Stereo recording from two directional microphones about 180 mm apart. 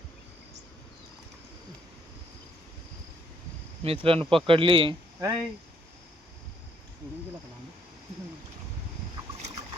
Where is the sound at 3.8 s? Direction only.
30° right (ahead or behind).